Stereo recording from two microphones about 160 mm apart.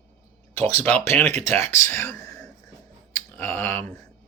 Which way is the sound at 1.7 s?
15° left (ahead or behind).